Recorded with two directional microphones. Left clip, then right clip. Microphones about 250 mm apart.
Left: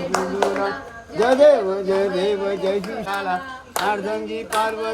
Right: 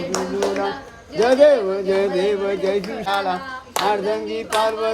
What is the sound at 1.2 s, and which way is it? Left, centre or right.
Speech, centre.